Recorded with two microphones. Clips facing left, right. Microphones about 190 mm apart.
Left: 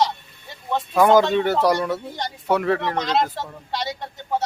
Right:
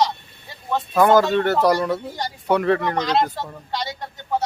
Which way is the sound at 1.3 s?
10° left (ahead or behind).